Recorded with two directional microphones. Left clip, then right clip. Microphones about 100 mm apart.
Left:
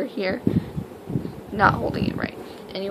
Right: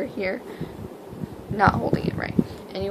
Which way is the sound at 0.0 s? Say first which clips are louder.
Left 1 dB; 15° left (ahead or behind).